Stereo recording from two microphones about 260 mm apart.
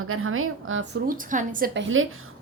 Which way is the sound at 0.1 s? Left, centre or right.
Right.